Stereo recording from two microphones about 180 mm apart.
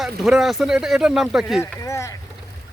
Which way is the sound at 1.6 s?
15° left (ahead or behind).